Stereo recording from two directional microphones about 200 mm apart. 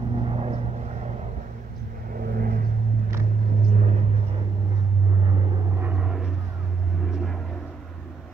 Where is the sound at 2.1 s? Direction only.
45° right (ahead or behind).